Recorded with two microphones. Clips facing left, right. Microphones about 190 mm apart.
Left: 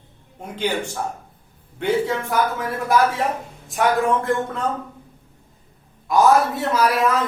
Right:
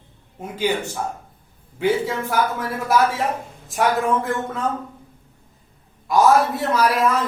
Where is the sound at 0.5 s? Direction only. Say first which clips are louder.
Right 1 dB; 10° right (ahead or behind).